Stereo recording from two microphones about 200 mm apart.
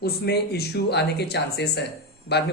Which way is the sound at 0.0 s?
55° left (ahead or behind).